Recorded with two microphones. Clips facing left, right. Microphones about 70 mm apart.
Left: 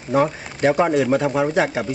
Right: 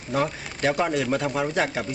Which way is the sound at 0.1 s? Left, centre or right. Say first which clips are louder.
Left 7 dB; left.